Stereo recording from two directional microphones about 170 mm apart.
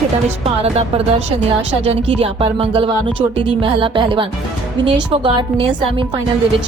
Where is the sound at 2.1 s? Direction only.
35° right (ahead or behind).